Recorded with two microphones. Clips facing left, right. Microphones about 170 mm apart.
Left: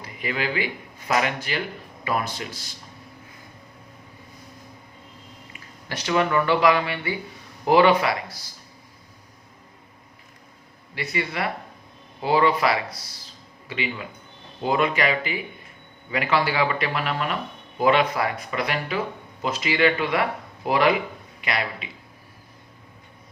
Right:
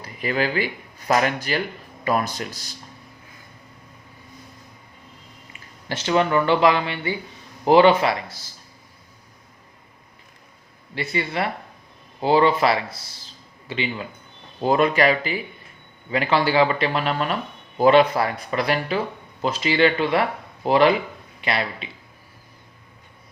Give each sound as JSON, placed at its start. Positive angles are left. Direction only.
{"t": 0.2, "sound": "speech", "side_deg": -40}
{"t": 5.9, "sound": "speech", "side_deg": -30}
{"t": 10.9, "sound": "speech", "side_deg": -30}
{"t": 14.6, "sound": "speech", "side_deg": -40}